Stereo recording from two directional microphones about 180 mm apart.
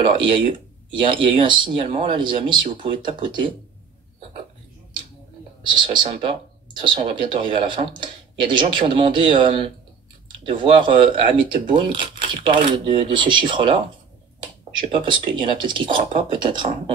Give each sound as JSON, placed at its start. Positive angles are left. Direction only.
{"t": 0.0, "sound": "speech", "side_deg": -30}
{"t": 5.6, "sound": "speech", "side_deg": -25}